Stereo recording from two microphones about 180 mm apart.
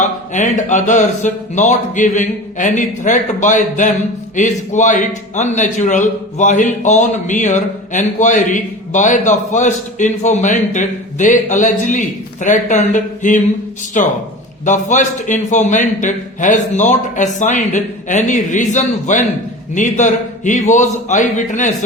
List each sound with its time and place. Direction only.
0.0 s a man's voice: 40° left (ahead or behind)